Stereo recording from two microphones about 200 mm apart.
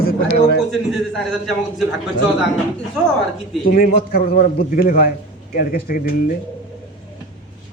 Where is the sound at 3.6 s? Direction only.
45° left (ahead or behind).